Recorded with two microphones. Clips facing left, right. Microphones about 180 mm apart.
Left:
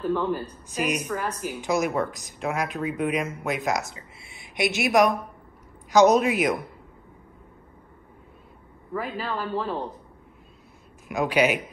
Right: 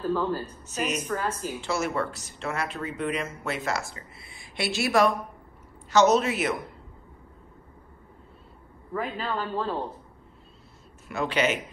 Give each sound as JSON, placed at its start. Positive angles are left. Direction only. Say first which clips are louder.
{"t": 0.0, "sound": "a woman's voice", "louder": "left 1 dB", "side_deg": 15}
{"t": 8.9, "sound": "a man's voice", "louder": "even", "side_deg": 5}
{"t": 11.1, "sound": "speech", "louder": "left 4 dB", "side_deg": 10}